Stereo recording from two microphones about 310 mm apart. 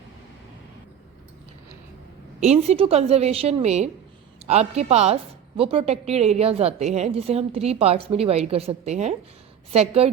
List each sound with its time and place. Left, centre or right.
2.4 s speech: right